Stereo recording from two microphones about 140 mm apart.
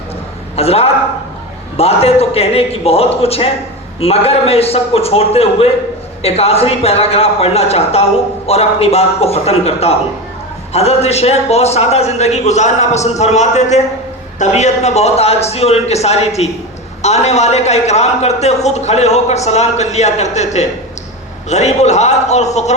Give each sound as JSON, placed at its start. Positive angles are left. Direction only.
{"t": 0.5, "sound": "a man's voice", "side_deg": 45}